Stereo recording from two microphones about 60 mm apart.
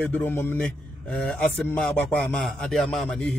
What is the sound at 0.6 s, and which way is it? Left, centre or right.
A man's voice, left.